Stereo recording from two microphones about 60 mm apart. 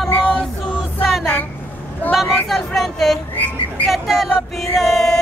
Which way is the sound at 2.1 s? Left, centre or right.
Centre.